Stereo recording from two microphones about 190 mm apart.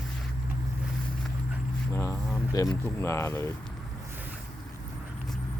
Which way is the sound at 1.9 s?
15° left (ahead or behind).